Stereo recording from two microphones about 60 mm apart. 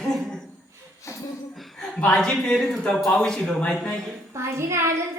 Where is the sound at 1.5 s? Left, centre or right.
Centre.